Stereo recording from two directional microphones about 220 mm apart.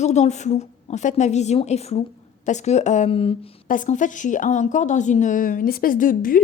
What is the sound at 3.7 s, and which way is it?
A woman's voice, 35° left (ahead or behind).